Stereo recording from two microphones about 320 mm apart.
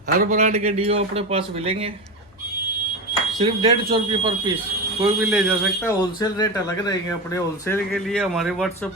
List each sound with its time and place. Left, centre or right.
0.2 s speech: right
3.3 s speech: centre
5.8 s speech: centre